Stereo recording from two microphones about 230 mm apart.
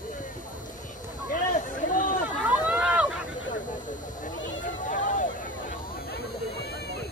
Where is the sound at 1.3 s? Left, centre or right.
Left.